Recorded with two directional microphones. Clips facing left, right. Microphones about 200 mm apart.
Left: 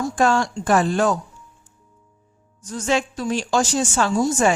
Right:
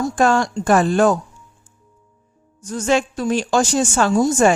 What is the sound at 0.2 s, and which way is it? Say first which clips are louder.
Speech: right 2 dB; 50° right (ahead or behind).